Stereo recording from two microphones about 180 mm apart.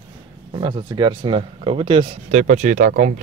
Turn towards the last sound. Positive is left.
turn(degrees=-45)  # may be behind; listen again after turning